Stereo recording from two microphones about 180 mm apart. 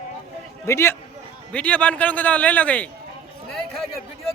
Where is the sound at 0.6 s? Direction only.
15° left (ahead or behind).